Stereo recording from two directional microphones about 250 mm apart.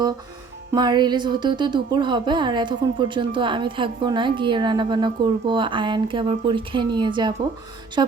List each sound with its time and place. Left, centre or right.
0.7 s speech: centre